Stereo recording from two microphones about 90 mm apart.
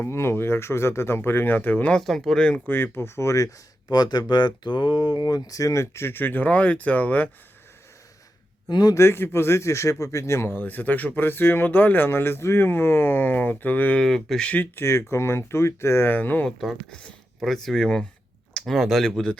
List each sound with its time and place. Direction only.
0.0 s a man's voice: 30° left (ahead or behind)
2.0 s speech: centre (ahead or behind)
2.6 s a man's voice: 25° left (ahead or behind)
3.9 s speech: 50° left (ahead or behind); by 7.3 s 20° left (ahead or behind)
8.7 s a man's voice: 45° left (ahead or behind)
9.0 s a man's voice: 30° left (ahead or behind)
14.0 s speech: 5° left (ahead or behind)
14.5 s a man's voice: 25° left (ahead or behind)
16.5 s speech: centre (ahead or behind)